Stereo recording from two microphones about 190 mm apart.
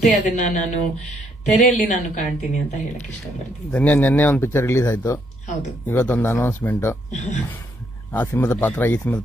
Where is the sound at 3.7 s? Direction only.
10° left (ahead or behind).